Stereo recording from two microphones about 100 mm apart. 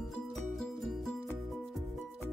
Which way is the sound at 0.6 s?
5° left (ahead or behind).